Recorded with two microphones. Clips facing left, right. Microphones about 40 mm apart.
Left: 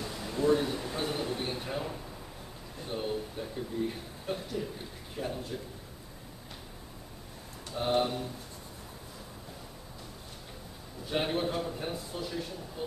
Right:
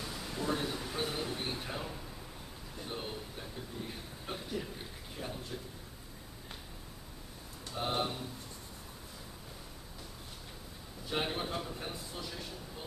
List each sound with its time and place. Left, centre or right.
0.0 s a man's voice: centre
4.3 s speech: centre
5.1 s a man's voice: centre
7.7 s a man's voice: centre
11.1 s a man's voice: centre